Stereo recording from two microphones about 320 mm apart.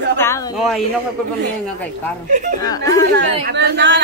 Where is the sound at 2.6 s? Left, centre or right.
Centre.